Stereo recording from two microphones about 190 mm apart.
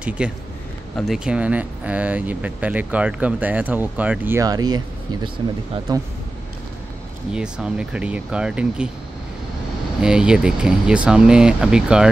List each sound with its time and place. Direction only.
0.2 s speech: 5° right (ahead or behind); by 6.0 s 20° right (ahead or behind)
7.3 s speech: 5° right (ahead or behind)
10.0 s speech: 5° right (ahead or behind)